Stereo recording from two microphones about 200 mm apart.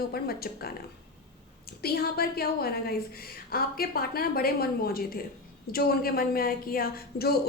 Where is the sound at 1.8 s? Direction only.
50° left (ahead or behind).